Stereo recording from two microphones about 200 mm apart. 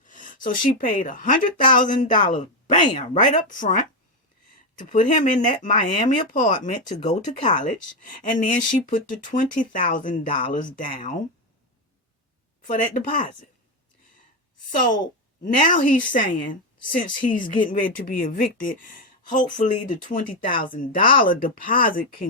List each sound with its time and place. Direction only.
0.0 s speech: 40° left (ahead or behind)
12.6 s speech: 40° left (ahead or behind)
14.7 s a woman's voice: 40° left (ahead or behind)